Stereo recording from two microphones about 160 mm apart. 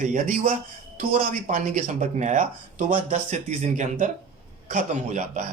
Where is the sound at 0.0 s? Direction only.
55° right (ahead or behind).